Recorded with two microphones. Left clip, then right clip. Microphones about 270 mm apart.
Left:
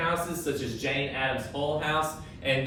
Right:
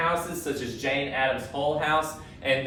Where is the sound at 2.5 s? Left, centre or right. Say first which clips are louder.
Right 2 dB; centre.